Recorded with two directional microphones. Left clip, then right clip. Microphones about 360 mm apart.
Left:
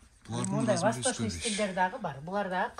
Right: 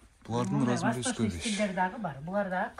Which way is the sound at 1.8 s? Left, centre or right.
Left.